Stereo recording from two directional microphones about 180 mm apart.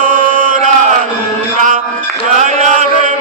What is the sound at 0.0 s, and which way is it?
Chant, 50° right (ahead or behind).